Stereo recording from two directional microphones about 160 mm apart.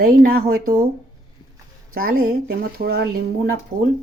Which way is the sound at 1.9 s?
65° right (ahead or behind).